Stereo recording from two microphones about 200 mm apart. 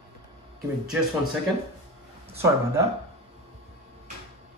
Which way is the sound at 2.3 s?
15° right (ahead or behind).